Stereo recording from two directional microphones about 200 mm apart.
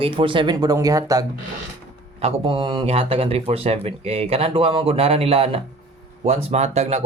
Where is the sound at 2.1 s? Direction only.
30° right (ahead or behind).